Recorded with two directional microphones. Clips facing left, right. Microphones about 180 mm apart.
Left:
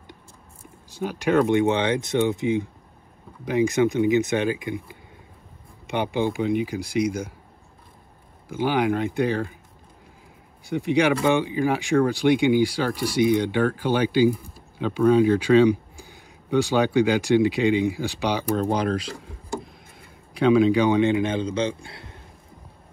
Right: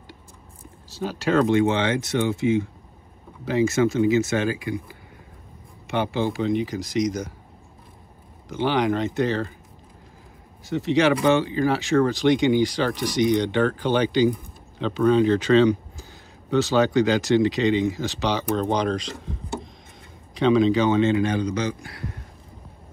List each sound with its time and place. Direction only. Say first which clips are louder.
0.8 s speech: left 1 dB; 15° left (ahead or behind)
5.9 s speech: even; 15° left (ahead or behind)
8.5 s speech: even; 10° left (ahead or behind)
10.6 s speech: right 1 dB; 15° left (ahead or behind)